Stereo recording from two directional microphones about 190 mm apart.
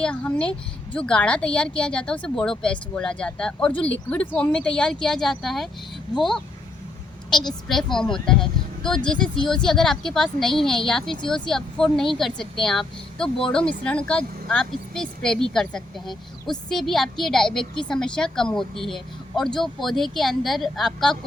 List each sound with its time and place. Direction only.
0.0 s a woman's voice: 5° left (ahead or behind)